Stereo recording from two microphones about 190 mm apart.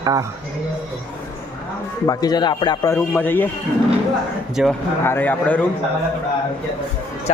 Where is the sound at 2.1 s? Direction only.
20° left (ahead or behind).